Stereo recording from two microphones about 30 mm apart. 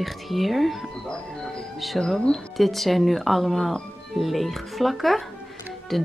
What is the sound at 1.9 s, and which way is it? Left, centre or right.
Speech, centre.